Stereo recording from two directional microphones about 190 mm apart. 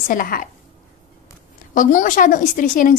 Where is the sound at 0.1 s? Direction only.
45° left (ahead or behind).